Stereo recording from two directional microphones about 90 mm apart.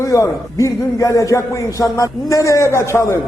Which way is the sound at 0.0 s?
35° left (ahead or behind).